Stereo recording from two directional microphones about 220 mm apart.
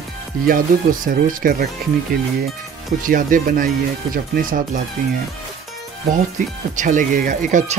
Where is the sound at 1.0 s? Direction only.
40° right (ahead or behind).